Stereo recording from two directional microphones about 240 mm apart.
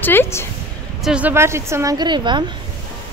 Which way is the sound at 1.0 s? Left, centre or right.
Centre.